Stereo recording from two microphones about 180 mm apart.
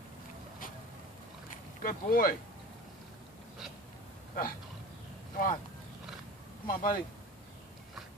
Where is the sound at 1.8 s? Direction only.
55° left (ahead or behind).